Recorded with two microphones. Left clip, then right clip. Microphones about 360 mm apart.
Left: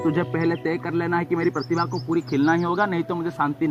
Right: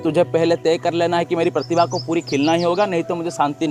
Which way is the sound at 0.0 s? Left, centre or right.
Centre.